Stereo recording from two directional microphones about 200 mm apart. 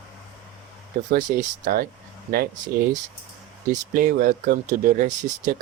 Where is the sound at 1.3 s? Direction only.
40° right (ahead or behind).